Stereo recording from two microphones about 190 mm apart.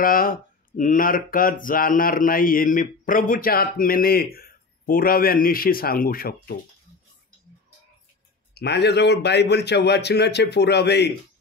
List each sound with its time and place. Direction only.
0.0 s speech: 50° left (ahead or behind)
8.5 s a man's voice: 60° left (ahead or behind)